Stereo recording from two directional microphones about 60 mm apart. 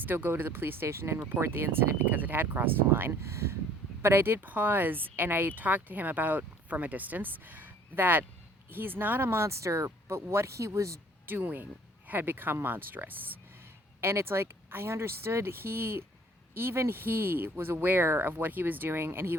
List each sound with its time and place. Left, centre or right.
0.0 s a woman's voice: right
11.3 s speech: right
14.0 s speech: right